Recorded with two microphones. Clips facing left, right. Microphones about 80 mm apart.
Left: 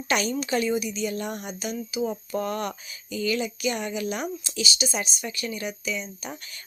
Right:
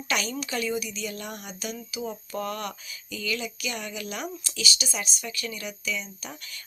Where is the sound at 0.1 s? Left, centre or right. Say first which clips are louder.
Left 5 dB; left.